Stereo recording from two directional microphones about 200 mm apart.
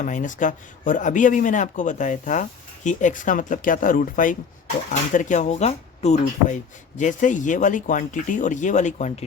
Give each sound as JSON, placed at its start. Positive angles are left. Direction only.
{"t": 0.0, "sound": "speech", "side_deg": 40}